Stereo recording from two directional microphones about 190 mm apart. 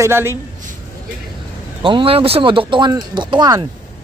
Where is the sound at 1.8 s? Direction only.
25° right (ahead or behind).